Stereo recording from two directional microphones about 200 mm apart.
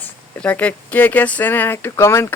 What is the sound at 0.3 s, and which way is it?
Speech, 5° left (ahead or behind).